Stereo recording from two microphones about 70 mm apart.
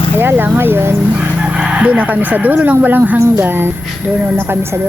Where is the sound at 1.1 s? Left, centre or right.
Centre.